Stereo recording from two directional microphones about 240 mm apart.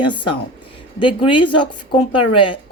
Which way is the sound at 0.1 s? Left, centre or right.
Centre.